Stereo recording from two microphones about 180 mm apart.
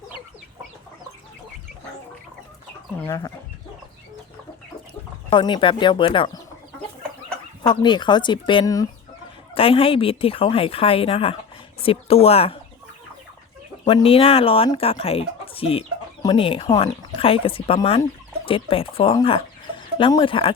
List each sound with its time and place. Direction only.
3.0 s speech: 15° left (ahead or behind)
5.3 s speech: 25° left (ahead or behind)
7.7 s speech: 25° left (ahead or behind)
9.6 s speech: 30° left (ahead or behind)
13.8 s speech: 30° left (ahead or behind)